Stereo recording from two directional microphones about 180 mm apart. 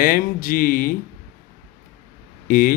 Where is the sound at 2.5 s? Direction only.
55° left (ahead or behind).